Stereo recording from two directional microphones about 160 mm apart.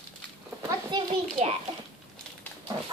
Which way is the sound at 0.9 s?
25° right (ahead or behind).